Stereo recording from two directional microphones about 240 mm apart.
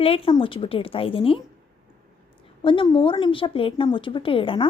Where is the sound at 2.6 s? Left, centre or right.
Left.